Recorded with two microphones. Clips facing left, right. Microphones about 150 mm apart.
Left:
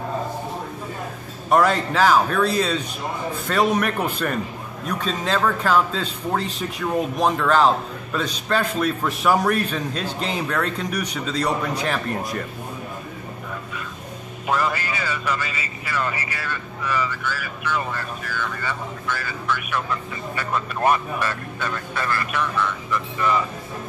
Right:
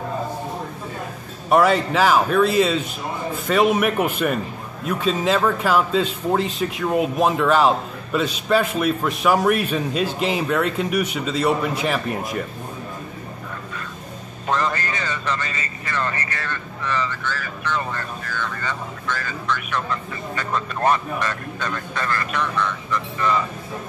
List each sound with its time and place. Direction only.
1.5 s a man's voice: 5° right (ahead or behind)
14.5 s speech: 10° left (ahead or behind)